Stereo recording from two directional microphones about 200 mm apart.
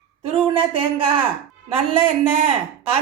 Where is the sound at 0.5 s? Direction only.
30° right (ahead or behind).